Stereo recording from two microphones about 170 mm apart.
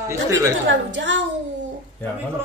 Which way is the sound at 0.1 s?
15° right (ahead or behind).